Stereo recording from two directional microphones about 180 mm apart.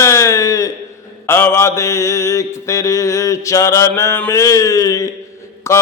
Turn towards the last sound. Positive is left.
turn(degrees=15)  # may be behind; listen again after turning